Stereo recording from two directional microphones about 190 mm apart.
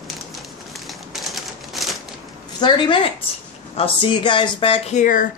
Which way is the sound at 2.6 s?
25° left (ahead or behind).